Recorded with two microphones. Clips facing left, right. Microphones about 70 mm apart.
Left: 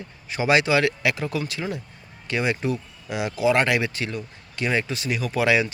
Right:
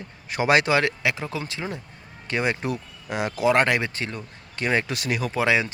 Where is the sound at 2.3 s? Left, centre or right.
Right.